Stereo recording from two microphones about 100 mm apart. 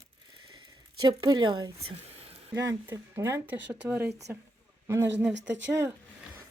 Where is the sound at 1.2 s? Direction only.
50° right (ahead or behind).